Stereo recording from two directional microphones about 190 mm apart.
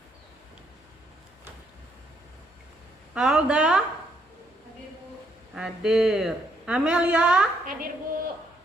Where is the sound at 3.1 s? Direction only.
5° right (ahead or behind).